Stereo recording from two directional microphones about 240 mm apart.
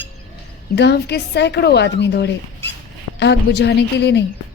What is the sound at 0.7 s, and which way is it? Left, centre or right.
Speech, left.